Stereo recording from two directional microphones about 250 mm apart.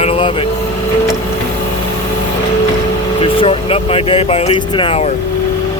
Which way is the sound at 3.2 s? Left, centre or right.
Left.